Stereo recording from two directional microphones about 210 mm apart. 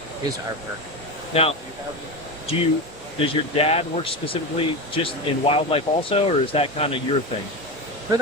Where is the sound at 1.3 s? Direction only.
30° left (ahead or behind).